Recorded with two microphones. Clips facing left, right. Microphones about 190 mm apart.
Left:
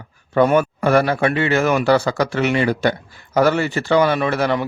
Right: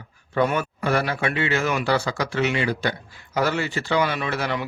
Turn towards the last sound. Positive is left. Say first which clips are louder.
# left 7 dB
turn(degrees=50)  # may be behind; listen again after turning